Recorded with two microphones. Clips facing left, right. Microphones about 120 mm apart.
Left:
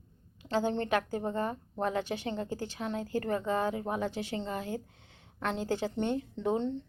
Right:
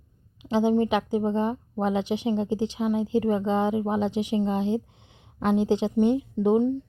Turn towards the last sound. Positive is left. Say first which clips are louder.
# right 9 dB
turn(degrees=-10)  # may be behind; listen again after turning